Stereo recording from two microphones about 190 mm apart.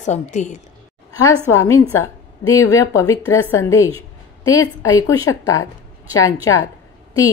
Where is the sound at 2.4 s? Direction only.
15° left (ahead or behind).